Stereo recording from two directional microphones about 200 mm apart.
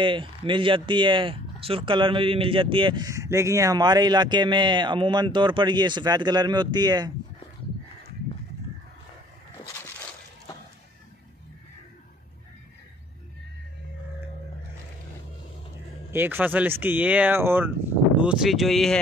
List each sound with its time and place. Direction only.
0.0 s speech: 25° right (ahead or behind)
16.1 s speech: 10° right (ahead or behind)